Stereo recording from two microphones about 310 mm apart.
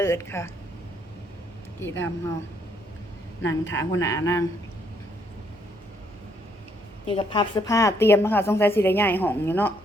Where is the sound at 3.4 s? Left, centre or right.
Centre.